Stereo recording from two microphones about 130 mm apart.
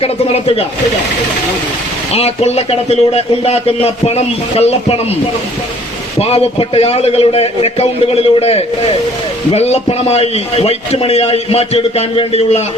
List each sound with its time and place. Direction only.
0.0 s a man's voice: 50° left (ahead or behind)
2.1 s a man's voice: 55° left (ahead or behind)
6.1 s a man's voice: 50° left (ahead or behind)